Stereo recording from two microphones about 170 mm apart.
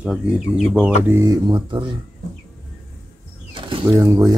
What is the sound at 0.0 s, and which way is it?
Speech, 5° right (ahead or behind).